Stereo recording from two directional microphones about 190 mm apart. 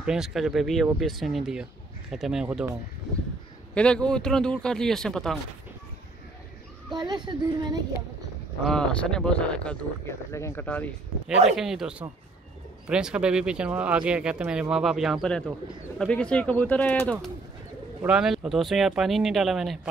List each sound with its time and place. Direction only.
0.0 s speech: 5° right (ahead or behind)
3.7 s speech: 5° left (ahead or behind)
7.2 s speech: 20° right (ahead or behind)
8.6 s speech: 5° left (ahead or behind)
11.5 s speech: centre (ahead or behind)
18.0 s speech: 5° right (ahead or behind)